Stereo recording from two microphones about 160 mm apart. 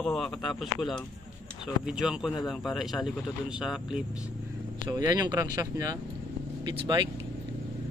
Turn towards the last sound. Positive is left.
turn(degrees=-25)  # may be behind; listen again after turning